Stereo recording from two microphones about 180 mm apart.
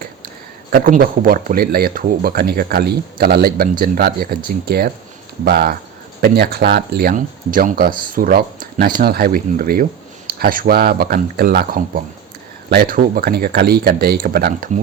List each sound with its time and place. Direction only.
0.7 s speech: 50° right (ahead or behind)